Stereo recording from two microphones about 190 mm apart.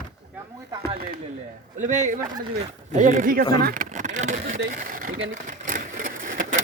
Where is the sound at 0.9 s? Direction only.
50° right (ahead or behind).